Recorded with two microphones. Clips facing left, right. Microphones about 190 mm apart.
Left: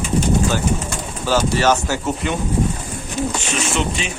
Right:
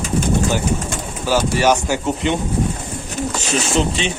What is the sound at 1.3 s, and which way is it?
Speech, 15° right (ahead or behind).